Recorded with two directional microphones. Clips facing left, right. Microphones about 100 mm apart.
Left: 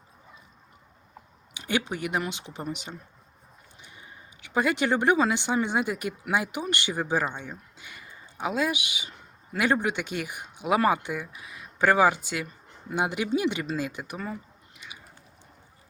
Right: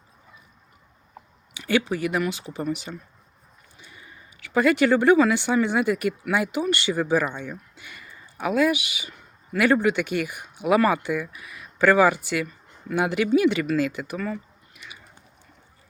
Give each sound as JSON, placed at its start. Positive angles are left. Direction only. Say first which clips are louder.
{"t": 1.5, "sound": "speech", "louder": "right 5 dB", "side_deg": 20}